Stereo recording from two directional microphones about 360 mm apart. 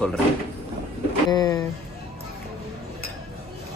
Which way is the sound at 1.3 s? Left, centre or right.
Centre.